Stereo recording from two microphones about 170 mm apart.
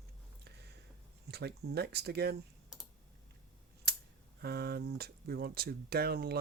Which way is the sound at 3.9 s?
70° right (ahead or behind).